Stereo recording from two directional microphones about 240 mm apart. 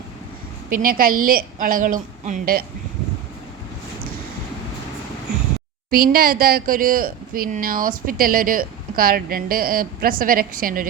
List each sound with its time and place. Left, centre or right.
0.7 s speech: right
5.9 s speech: right